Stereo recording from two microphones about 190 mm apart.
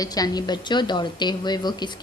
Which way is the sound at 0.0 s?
20° left (ahead or behind).